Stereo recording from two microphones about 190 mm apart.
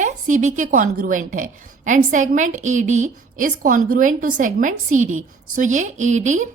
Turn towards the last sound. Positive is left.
turn(degrees=-40)  # may be behind; listen again after turning